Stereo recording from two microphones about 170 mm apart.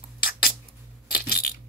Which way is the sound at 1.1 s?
60° left (ahead or behind).